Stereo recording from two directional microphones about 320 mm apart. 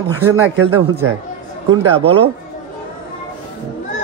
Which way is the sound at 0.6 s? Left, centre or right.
Right.